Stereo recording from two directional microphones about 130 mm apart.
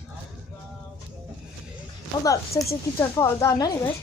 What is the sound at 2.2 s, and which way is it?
Speech, 25° left (ahead or behind).